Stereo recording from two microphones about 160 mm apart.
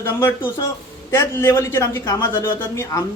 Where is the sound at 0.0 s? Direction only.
15° left (ahead or behind).